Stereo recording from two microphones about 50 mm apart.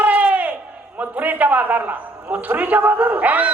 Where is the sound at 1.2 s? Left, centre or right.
Right.